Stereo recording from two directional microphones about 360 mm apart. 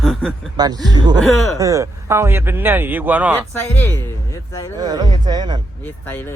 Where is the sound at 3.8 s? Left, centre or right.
Centre.